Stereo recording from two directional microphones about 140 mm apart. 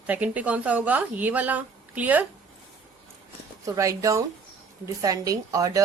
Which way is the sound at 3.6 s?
25° right (ahead or behind).